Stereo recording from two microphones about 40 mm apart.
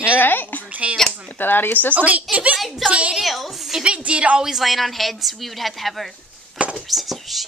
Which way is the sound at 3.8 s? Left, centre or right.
Right.